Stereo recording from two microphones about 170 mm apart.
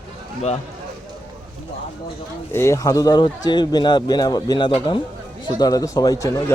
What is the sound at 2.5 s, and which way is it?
Speech, 15° left (ahead or behind).